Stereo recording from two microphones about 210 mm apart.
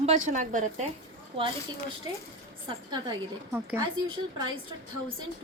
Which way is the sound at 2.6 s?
20° right (ahead or behind).